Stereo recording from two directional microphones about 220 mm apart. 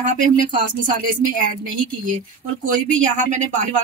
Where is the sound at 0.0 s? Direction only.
35° right (ahead or behind).